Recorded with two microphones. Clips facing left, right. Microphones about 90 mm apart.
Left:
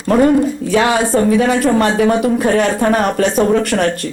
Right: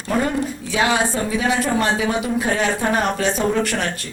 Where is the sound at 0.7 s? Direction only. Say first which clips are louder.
Left 5 dB; 50° left (ahead or behind).